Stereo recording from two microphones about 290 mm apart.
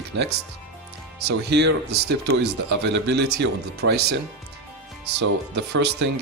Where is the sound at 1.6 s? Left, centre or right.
Right.